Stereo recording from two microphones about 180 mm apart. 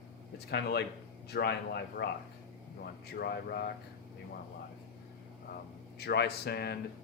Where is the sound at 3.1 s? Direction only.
60° left (ahead or behind).